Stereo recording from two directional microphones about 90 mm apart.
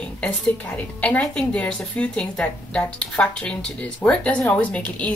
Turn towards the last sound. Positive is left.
turn(degrees=15)  # may be behind; listen again after turning